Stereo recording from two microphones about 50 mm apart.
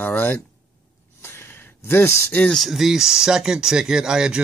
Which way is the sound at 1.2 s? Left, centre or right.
Left.